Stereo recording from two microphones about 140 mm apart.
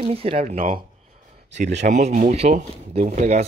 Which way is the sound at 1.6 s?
60° right (ahead or behind).